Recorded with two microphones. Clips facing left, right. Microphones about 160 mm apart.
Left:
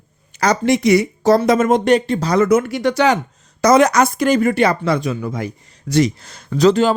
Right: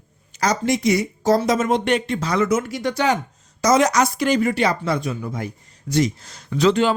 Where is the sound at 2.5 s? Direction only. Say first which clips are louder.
Left 6 dB; 60° left (ahead or behind); by 3.1 s 80° left.